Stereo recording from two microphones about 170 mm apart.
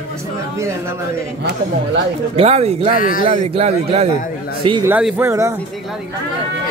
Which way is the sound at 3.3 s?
40° right (ahead or behind).